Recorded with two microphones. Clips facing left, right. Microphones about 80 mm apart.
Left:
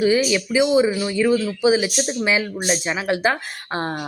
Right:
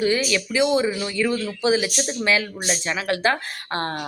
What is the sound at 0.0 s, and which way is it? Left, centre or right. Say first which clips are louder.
Speech: left 4 dB; centre.